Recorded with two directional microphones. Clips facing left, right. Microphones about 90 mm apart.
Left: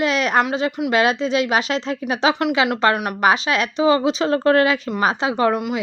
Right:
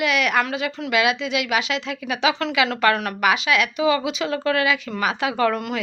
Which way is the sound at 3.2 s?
35° left (ahead or behind).